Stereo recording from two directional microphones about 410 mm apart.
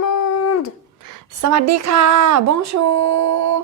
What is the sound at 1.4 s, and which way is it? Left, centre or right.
Speech, right.